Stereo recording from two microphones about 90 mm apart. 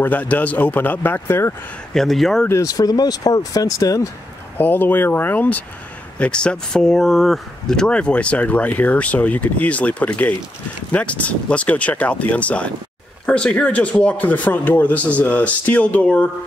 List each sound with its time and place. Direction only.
0.0 s speech: 20° left (ahead or behind)
2.0 s speech: 5° left (ahead or behind)
2.6 s speech: 45° left (ahead or behind)
4.6 s speech: 20° left (ahead or behind)